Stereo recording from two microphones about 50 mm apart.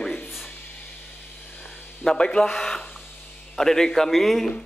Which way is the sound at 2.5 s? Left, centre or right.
Centre.